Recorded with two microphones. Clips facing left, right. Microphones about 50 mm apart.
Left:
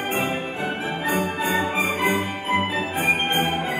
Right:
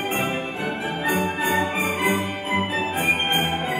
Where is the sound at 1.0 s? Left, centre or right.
Right.